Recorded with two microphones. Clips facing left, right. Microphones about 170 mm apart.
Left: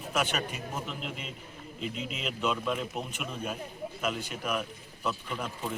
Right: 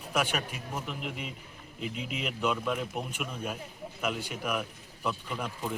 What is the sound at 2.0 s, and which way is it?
Speech, 60° right (ahead or behind).